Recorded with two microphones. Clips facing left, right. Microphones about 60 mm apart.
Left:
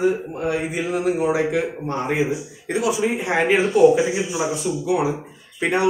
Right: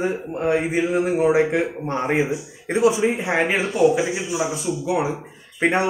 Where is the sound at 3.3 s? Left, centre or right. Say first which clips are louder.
Left 3 dB; centre.